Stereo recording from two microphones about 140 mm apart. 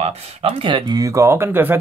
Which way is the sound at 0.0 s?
45° right (ahead or behind).